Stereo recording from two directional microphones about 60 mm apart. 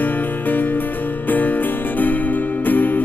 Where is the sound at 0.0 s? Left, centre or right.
Left.